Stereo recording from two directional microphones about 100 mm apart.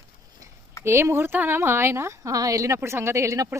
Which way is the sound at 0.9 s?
25° right (ahead or behind).